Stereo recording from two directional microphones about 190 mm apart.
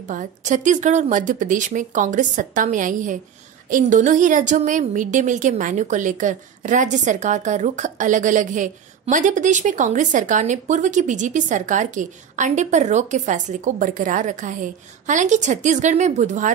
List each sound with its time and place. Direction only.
0.1 s a woman's voice: 40° right (ahead or behind)